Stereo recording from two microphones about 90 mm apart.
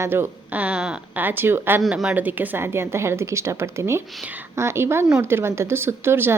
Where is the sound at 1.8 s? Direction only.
5° right (ahead or behind).